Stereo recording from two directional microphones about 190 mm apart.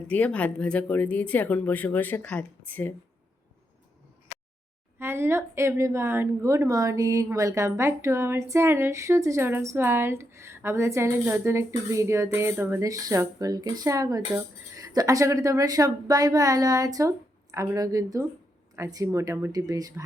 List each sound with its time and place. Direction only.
0.1 s speech: 5° left (ahead or behind)
4.9 s a woman's voice: 15° right (ahead or behind)